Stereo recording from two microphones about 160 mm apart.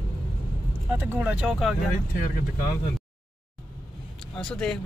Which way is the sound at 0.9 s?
10° right (ahead or behind).